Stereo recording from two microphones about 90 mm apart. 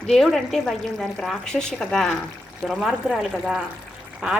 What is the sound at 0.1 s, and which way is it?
Speech, 5° left (ahead or behind).